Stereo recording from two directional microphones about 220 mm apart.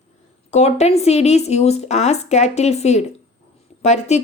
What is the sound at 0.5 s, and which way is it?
Speech, 30° left (ahead or behind).